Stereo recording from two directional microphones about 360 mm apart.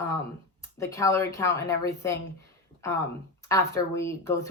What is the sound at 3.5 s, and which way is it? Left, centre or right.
Speech, centre.